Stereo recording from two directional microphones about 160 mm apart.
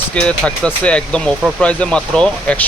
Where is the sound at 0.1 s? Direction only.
5° left (ahead or behind).